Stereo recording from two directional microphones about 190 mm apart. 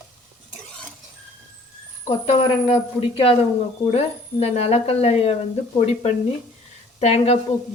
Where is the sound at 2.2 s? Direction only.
30° left (ahead or behind).